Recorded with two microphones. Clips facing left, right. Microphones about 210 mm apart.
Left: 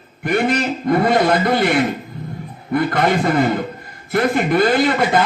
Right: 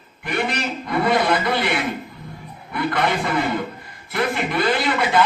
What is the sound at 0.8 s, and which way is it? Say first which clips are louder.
A man's voice: left 4 dB; 45° left (ahead or behind).